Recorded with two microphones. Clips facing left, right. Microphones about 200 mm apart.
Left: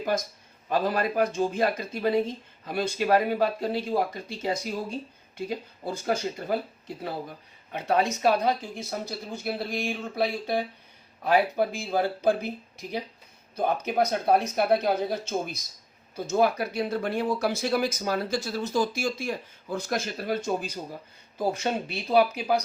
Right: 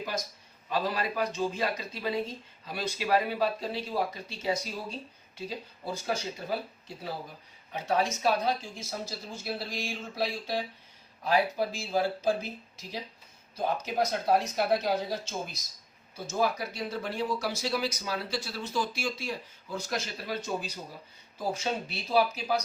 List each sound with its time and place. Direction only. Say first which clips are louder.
0.7 s speech: left 5 dB; 50° left (ahead or behind)